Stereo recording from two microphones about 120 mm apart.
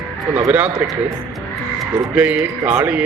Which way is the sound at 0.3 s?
10° right (ahead or behind).